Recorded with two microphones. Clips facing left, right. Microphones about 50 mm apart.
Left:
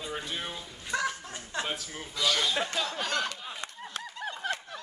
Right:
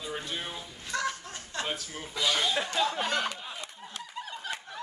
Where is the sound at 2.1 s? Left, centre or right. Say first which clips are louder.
Even; centre.